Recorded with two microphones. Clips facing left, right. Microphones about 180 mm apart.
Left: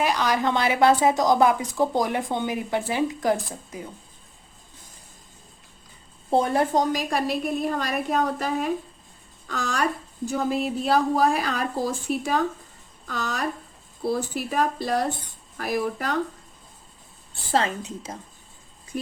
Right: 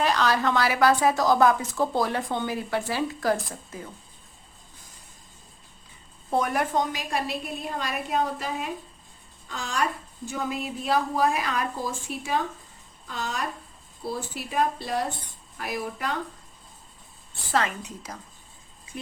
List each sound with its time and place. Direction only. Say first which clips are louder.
0.0 s a woman's voice: left 1 dB; 10° left (ahead or behind)
6.3 s a woman's voice: left 4 dB; 30° left (ahead or behind)
9.5 s speech: left 6 dB; 75° left (ahead or behind)
10.2 s a woman's voice: left 6 dB; 35° left (ahead or behind)
14.0 s a woman's voice: left 7 dB; 45° left (ahead or behind)
17.5 s a woman's voice: left 3 dB; 30° left (ahead or behind)